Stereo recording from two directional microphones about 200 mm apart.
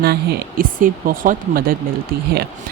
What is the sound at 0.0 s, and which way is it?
Speech, 50° right (ahead or behind).